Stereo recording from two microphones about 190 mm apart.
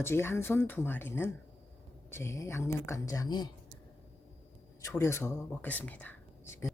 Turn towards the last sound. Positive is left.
turn(degrees=15)  # may be behind; listen again after turning